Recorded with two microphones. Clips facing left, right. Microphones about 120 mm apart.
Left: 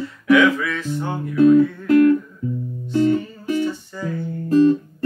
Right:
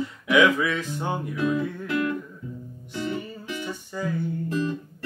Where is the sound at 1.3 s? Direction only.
45° left (ahead or behind).